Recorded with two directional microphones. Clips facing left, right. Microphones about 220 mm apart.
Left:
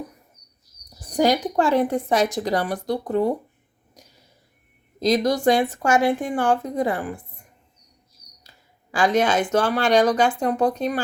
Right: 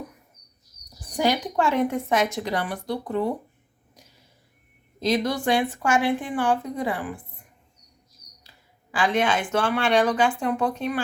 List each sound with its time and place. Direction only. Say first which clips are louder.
1.1 s speech: left 4 dB; 40° left (ahead or behind)
4.9 s speech: left 4 dB; 40° left (ahead or behind)
8.9 s speech: left 3 dB; 40° left (ahead or behind)